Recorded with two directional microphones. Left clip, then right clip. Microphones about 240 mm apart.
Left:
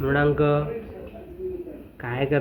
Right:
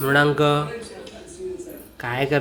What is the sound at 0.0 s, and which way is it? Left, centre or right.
Speech, right.